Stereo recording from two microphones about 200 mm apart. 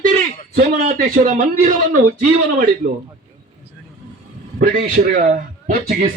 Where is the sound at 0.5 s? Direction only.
45° right (ahead or behind).